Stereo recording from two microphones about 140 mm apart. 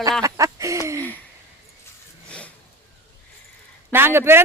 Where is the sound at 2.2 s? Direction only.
10° left (ahead or behind).